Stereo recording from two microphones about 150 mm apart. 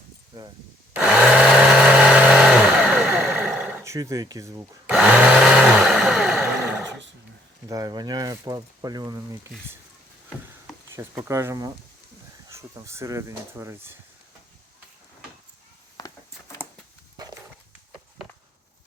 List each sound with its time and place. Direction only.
0.9 s vehicle: 10° right (ahead or behind)
3.8 s speech: 20° right (ahead or behind)
4.9 s a sound: 10° right (ahead or behind)
7.7 s speech: 25° right (ahead or behind)
10.9 s speech: 15° right (ahead or behind)
16.0 s a sound: 25° left (ahead or behind)